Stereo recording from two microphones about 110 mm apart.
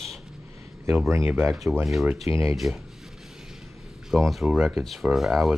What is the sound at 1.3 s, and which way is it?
Speech, 20° right (ahead or behind).